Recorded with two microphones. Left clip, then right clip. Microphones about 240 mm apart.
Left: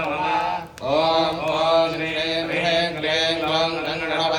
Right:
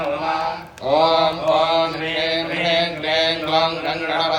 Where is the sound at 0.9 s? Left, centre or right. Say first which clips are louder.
Right 4 dB; centre.